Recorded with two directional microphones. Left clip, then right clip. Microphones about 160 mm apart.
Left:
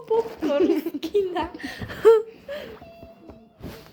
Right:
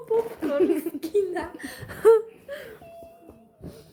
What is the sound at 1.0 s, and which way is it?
A woman's voice, 20° right (ahead or behind).